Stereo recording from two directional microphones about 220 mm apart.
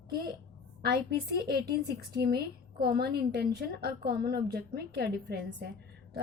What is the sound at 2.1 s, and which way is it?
A woman's voice, 45° right (ahead or behind).